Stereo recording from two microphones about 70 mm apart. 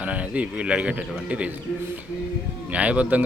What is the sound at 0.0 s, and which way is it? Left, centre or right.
Speech, centre.